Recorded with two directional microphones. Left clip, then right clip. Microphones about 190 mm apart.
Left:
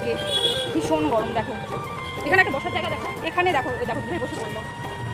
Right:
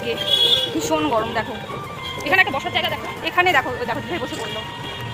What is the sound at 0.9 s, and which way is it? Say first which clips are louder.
Speech: even; 5° right (ahead or behind).